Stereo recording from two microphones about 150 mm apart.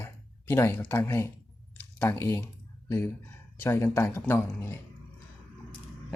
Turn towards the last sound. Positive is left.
turn(degrees=15)  # may be behind; listen again after turning